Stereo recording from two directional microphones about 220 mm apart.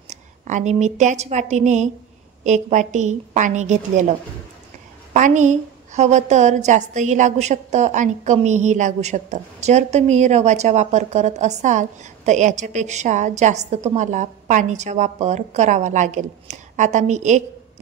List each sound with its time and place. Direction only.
0.1 s a woman's voice: 35° right (ahead or behind)
5.1 s a woman's voice: 35° right (ahead or behind)